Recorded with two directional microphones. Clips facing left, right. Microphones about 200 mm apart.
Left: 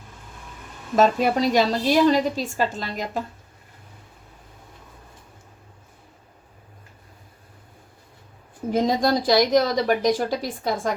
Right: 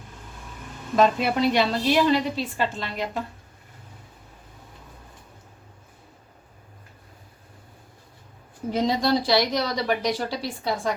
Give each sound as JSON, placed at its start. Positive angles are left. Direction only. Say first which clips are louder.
{"t": 0.9, "sound": "a woman's voice", "louder": "left 2 dB", "side_deg": 40}
{"t": 8.7, "sound": "speech", "louder": "left 2 dB", "side_deg": 45}